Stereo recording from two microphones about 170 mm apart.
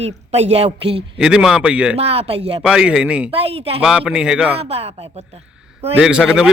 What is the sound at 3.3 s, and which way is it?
Speech, 35° right (ahead or behind).